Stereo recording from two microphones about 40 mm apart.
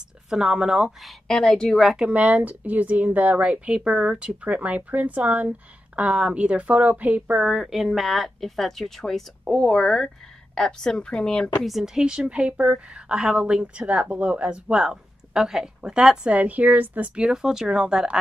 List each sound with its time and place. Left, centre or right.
0.3 s speech: centre
1.2 s a woman's voice: centre
2.1 s speech: right
3.6 s speech: right
4.5 s speech: right
5.9 s speech: right
6.7 s speech: right
7.3 s a woman's voice: centre; by 11.5 s left
11.8 s speech: centre
12.1 s speech: right
14.8 s speech: centre
16.3 s speech: right
17.1 s speech: centre